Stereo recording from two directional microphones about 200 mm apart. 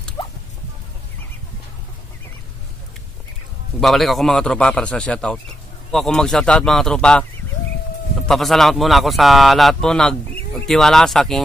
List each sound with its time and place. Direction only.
0.2 s a sound: 25° left (ahead or behind)
3.8 s a man's voice: centre (ahead or behind)
8.3 s a man's voice: centre (ahead or behind)